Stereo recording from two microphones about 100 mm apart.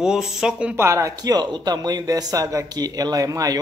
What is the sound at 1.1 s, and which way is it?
Speech, 40° right (ahead or behind).